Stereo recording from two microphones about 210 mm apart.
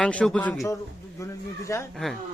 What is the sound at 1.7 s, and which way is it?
Speech, 15° left (ahead or behind).